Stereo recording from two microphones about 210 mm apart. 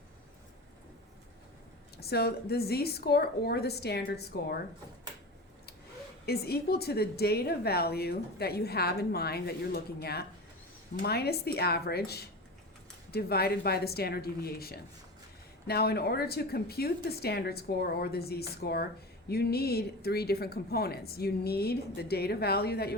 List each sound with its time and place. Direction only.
2.0 s a woman's voice: 50° left (ahead or behind)
6.2 s a woman's voice: 50° left (ahead or behind)